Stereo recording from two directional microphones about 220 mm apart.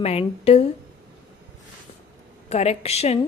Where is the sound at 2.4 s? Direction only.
30° left (ahead or behind).